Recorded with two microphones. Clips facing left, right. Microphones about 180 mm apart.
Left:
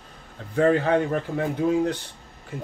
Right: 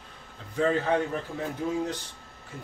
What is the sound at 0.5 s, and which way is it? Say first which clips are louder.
A man's voice: left 5 dB; 65° left (ahead or behind).